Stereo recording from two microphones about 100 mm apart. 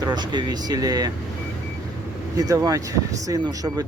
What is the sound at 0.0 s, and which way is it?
Speech, 45° right (ahead or behind).